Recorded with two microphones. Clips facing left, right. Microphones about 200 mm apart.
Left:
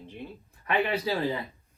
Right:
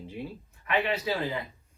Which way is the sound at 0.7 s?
30° left (ahead or behind).